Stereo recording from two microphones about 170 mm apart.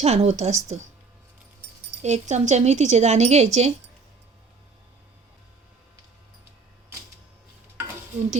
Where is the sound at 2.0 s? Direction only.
40° right (ahead or behind).